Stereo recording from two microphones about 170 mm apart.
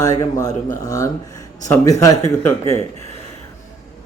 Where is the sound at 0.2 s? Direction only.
20° left (ahead or behind).